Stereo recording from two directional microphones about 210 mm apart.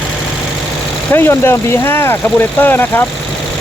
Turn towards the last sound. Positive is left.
turn(degrees=10)  # may be behind; listen again after turning